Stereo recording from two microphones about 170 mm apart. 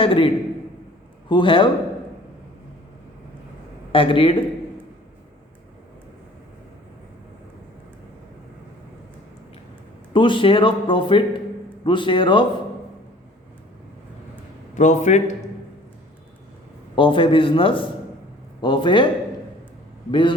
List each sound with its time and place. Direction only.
0.0 s a man's voice: 30° left (ahead or behind)
1.3 s a man's voice: 30° left (ahead or behind)
3.9 s a man's voice: 30° left (ahead or behind)
10.1 s a man's voice: 30° left (ahead or behind)
14.8 s a man's voice: 45° left (ahead or behind)
16.9 s a man's voice: 30° left (ahead or behind)
20.1 s a man's voice: 30° left (ahead or behind)